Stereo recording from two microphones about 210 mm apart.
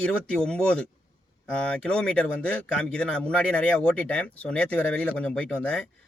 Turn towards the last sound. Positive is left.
turn(degrees=5)  # may be behind; listen again after turning